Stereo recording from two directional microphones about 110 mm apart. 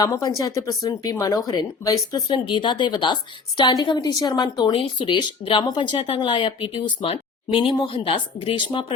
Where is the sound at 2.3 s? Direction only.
45° left (ahead or behind).